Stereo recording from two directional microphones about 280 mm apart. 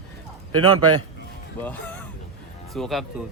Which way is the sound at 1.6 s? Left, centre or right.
Centre.